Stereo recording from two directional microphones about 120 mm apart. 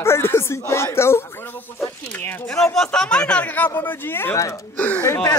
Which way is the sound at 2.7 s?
5° left (ahead or behind).